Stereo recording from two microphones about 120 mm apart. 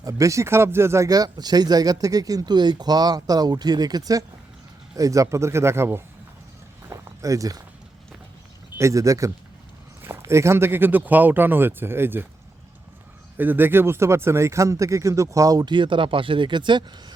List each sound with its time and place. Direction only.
0.0 s speech: 25° right (ahead or behind)
6.9 s walk: 25° right (ahead or behind)
8.8 s speech: 25° right (ahead or behind)
13.3 s speech: 15° right (ahead or behind); by 16.8 s 40° right (ahead or behind)